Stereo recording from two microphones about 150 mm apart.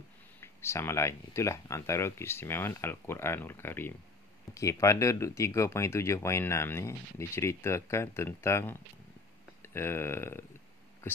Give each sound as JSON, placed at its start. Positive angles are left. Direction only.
{"t": 0.4, "sound": "speech", "side_deg": 15}